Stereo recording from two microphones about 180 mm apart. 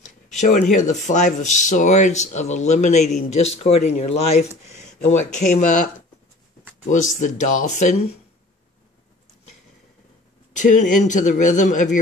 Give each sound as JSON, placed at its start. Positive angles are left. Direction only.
{"t": 0.0, "sound": "speech", "side_deg": 45}
{"t": 7.2, "sound": "speech", "side_deg": 45}
{"t": 10.5, "sound": "speech", "side_deg": 45}